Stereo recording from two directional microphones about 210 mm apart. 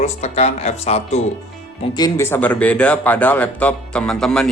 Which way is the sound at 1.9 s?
20° left (ahead or behind).